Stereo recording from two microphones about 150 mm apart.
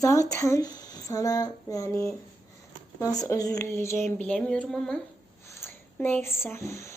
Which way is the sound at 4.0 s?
5° left (ahead or behind).